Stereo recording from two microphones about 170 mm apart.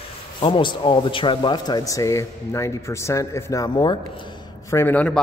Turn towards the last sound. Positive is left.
turn(degrees=5)  # may be behind; listen again after turning